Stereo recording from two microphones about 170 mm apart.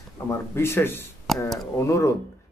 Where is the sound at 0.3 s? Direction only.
15° left (ahead or behind).